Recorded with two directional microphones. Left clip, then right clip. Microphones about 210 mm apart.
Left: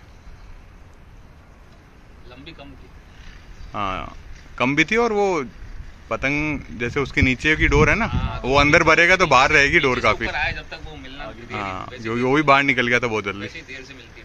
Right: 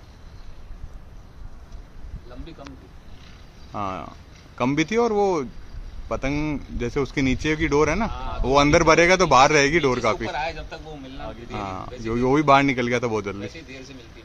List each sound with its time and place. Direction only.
3.7 s speech: centre (ahead or behind)
8.1 s a man's voice: 40° right (ahead or behind)
8.4 s speech: centre (ahead or behind)
10.3 s a sound: 40° right (ahead or behind)
11.5 s speech: centre (ahead or behind)
13.5 s a man's voice: 40° right (ahead or behind)